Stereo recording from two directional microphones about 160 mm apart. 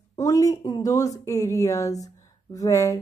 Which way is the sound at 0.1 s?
20° left (ahead or behind).